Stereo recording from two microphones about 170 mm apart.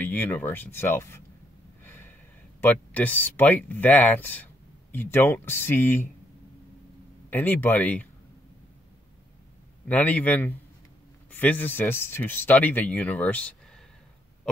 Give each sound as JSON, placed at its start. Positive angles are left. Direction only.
{"t": 0.0, "sound": "speech", "side_deg": 10}
{"t": 1.9, "sound": "a sound", "side_deg": 10}
{"t": 2.6, "sound": "speech", "side_deg": 10}
{"t": 7.2, "sound": "speech", "side_deg": 10}
{"t": 9.8, "sound": "speech", "side_deg": 10}